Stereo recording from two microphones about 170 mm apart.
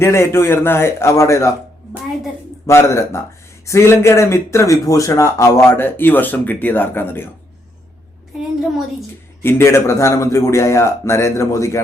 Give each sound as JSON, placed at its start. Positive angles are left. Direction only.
{"t": 0.0, "sound": "speech", "side_deg": 15}
{"t": 2.6, "sound": "speech", "side_deg": 15}
{"t": 9.4, "sound": "speech", "side_deg": 15}